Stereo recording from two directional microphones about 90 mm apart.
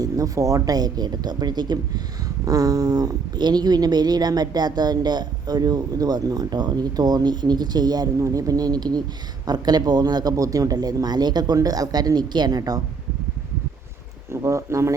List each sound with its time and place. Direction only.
0.0 s speech: 40° right (ahead or behind)
2.4 s speech: 40° right (ahead or behind)
14.3 s speech: 35° right (ahead or behind)